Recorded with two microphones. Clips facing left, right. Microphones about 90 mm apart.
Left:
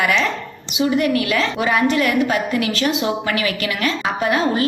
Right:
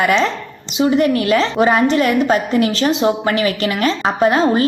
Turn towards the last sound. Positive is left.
turn(degrees=-30)  # may be behind; listen again after turning